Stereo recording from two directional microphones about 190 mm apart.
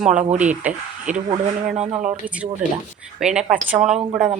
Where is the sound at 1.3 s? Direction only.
35° right (ahead or behind).